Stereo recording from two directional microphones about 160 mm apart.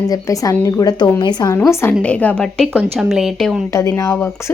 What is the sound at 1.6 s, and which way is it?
A woman's voice, 15° left (ahead or behind).